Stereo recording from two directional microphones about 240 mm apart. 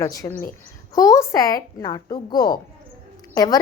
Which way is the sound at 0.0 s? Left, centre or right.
Centre.